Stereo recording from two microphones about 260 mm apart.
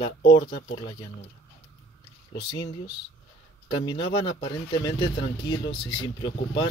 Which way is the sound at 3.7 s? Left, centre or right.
Centre.